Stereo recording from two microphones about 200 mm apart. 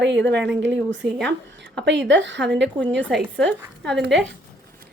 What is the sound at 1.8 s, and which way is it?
Speech, 60° right (ahead or behind).